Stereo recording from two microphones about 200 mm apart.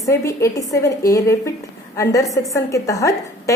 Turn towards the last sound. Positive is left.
turn(degrees=15)  # may be behind; listen again after turning